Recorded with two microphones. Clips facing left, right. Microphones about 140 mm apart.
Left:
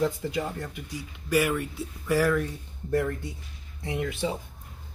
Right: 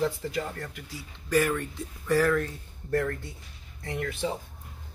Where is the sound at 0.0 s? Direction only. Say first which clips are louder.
Left 2 dB; 15° left (ahead or behind).